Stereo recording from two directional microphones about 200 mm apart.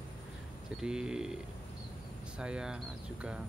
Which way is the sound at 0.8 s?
5° right (ahead or behind).